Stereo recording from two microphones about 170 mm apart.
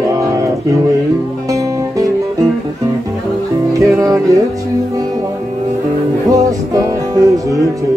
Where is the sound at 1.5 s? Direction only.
20° right (ahead or behind).